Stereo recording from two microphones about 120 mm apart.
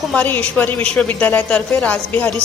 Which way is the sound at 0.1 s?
10° left (ahead or behind).